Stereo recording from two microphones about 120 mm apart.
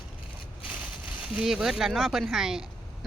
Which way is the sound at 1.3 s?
5° right (ahead or behind).